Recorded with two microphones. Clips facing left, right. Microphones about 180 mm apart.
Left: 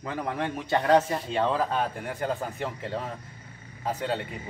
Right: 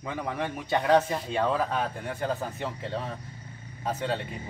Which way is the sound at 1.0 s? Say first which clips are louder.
Left 1 dB; 5° left (ahead or behind).